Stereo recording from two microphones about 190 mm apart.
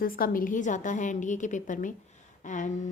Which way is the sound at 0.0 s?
50° left (ahead or behind).